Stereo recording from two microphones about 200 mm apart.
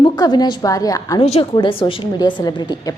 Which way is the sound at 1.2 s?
30° left (ahead or behind).